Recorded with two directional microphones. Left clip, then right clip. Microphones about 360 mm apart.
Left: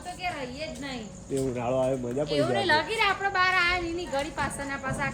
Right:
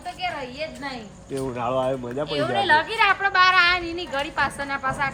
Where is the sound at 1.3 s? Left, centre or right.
Centre.